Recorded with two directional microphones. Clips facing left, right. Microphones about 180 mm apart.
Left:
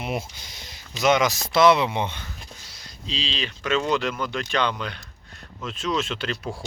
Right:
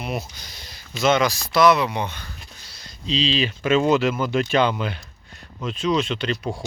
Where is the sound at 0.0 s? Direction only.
25° left (ahead or behind).